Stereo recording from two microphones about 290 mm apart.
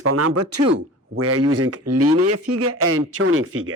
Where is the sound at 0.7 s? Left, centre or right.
Right.